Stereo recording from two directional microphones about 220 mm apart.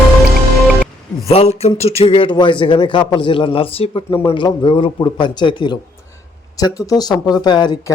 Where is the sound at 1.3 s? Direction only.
30° left (ahead or behind).